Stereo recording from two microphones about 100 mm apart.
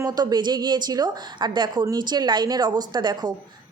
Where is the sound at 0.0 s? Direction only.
40° right (ahead or behind).